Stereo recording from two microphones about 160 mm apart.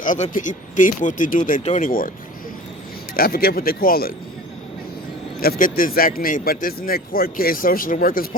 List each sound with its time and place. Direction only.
0.0 s speech: 55° left (ahead or behind)
3.2 s speech: 70° left (ahead or behind)
5.4 s speech: 65° left (ahead or behind)